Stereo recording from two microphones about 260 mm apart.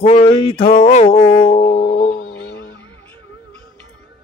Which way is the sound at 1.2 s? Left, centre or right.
Centre.